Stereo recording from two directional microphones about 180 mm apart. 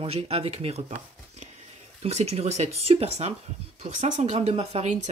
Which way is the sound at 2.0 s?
35° right (ahead or behind).